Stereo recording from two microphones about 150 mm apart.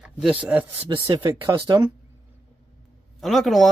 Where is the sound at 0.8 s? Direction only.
35° right (ahead or behind).